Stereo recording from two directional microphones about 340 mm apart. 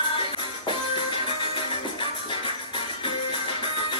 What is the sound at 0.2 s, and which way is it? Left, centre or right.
Music, centre.